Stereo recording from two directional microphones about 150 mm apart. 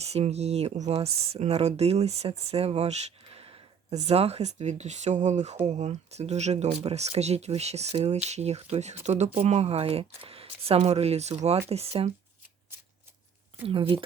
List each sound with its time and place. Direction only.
0.0 s speech: 45° right (ahead or behind)
12.7 s shuffling cards: 15° right (ahead or behind)
13.7 s speech: 35° right (ahead or behind)